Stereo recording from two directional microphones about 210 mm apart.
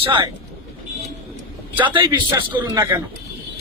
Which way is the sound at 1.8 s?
25° right (ahead or behind).